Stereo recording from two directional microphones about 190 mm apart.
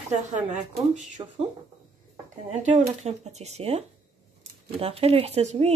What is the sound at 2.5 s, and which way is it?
Speech, 40° right (ahead or behind).